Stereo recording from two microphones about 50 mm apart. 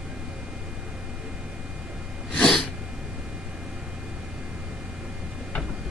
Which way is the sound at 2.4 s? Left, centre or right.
Centre.